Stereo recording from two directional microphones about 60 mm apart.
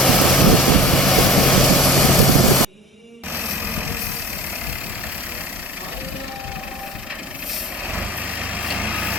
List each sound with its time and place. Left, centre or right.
0.0 s vehicle: centre
3.3 s vehicle: right
7.9 s vehicle: right